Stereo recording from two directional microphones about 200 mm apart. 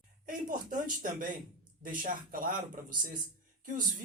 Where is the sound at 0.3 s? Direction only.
45° right (ahead or behind).